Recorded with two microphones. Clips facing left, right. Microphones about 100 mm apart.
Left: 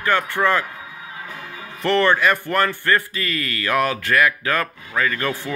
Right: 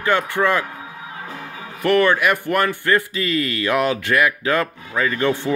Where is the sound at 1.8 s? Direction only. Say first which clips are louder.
Right 1 dB; 10° right (ahead or behind).